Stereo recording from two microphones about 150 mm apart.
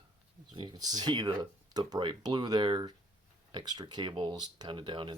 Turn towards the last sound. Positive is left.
turn(degrees=-30)  # may be behind; listen again after turning